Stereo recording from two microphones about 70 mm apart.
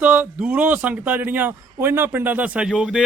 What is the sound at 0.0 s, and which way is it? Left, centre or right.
A man's voice, centre.